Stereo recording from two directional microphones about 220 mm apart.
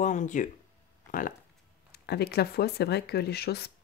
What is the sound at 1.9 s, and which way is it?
Speech, 45° left (ahead or behind).